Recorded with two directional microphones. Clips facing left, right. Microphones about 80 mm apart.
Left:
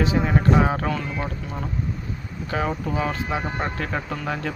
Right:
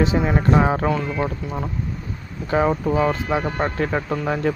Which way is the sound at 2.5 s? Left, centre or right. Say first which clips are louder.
Right 7 dB; right.